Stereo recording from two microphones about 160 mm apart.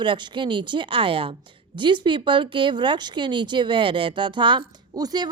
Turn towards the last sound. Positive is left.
turn(degrees=-25)  # may be behind; listen again after turning